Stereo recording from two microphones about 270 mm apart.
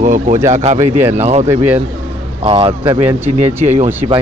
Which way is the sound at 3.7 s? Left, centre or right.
Right.